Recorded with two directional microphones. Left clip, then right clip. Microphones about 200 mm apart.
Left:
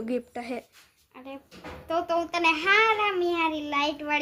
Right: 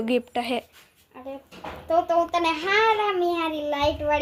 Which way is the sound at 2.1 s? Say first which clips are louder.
Right 2 dB; 20° left (ahead or behind).